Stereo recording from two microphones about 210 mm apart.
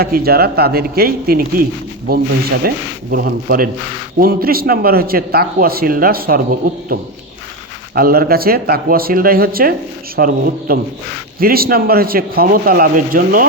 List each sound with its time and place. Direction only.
0.0 s a man's voice: 45° right (ahead or behind)
2.6 s a man's voice: 50° right (ahead or behind)